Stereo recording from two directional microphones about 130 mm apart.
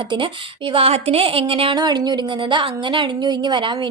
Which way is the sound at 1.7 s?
35° right (ahead or behind).